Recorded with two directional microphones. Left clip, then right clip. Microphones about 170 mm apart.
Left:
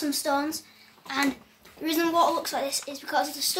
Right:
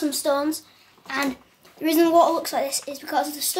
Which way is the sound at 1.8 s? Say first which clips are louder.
Right 6 dB; 50° right (ahead or behind).